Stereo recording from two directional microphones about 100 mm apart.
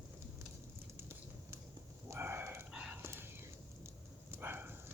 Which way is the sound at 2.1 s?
25° right (ahead or behind).